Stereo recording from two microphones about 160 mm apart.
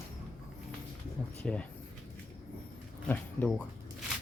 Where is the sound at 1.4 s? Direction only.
10° left (ahead or behind).